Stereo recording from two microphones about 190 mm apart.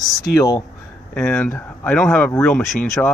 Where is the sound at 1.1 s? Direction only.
5° left (ahead or behind).